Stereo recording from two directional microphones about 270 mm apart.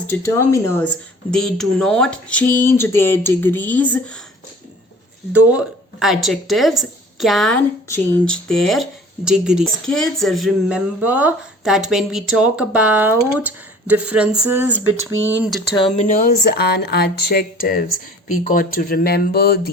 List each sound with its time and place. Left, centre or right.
0.1 s speech: centre
5.3 s speech: centre
15.7 s speech: centre
16.0 s speech: left